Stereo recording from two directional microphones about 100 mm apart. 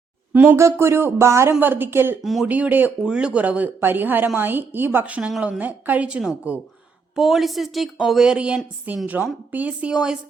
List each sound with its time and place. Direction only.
0.5 s speech: 25° right (ahead or behind)
2.2 s a woman's voice: centre (ahead or behind)
2.5 s a woman's voice: 15° right (ahead or behind)